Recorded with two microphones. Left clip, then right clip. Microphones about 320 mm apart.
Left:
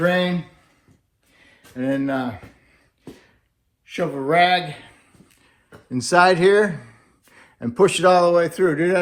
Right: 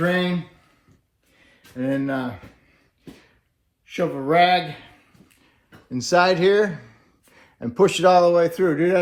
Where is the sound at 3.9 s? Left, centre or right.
Left.